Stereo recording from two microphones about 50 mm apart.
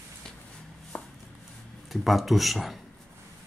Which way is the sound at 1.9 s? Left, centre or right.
Centre.